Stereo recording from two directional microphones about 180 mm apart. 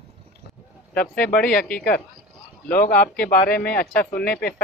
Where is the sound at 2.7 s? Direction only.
55° left (ahead or behind).